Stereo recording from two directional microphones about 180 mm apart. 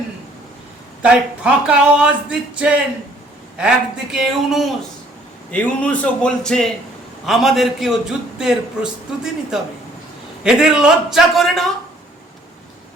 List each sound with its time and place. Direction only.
1.0 s speech: 5° right (ahead or behind)
4.1 s a man's voice: centre (ahead or behind)